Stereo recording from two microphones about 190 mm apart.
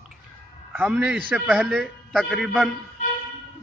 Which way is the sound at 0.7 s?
5° right (ahead or behind).